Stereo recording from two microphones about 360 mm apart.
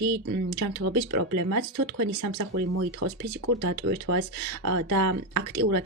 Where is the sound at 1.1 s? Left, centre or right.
Right.